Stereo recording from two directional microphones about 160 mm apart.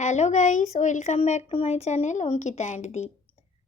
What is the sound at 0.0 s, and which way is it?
A woman's voice, 45° left (ahead or behind).